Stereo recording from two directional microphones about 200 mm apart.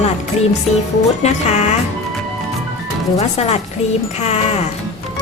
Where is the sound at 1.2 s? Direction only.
35° left (ahead or behind).